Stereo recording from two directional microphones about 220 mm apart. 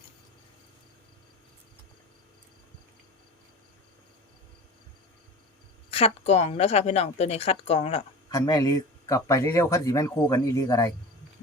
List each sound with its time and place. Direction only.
5.9 s a woman's voice: 30° left (ahead or behind)
8.3 s speech: 15° left (ahead or behind)